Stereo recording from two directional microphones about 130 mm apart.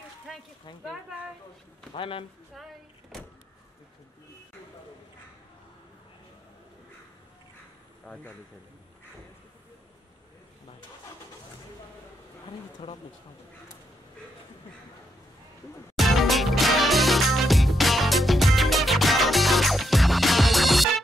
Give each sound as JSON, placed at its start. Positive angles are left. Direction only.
{"t": 0.3, "sound": "speech", "side_deg": 0}
{"t": 2.0, "sound": "speech", "side_deg": 45}
{"t": 2.5, "sound": "speech", "side_deg": 0}
{"t": 8.0, "sound": "speech", "side_deg": 10}
{"t": 12.8, "sound": "speech", "side_deg": 45}
{"t": 16.0, "sound": "music", "side_deg": 0}